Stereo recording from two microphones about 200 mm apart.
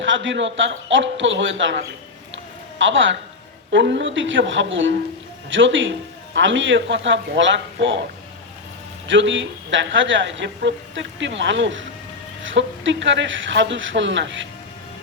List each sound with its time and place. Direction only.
0.0 s a woman's voice: 70° right (ahead or behind)
2.3 s a sound: 70° right (ahead or behind)
3.7 s a woman's voice: 65° right (ahead or behind)
9.0 s a woman's voice: 70° right (ahead or behind)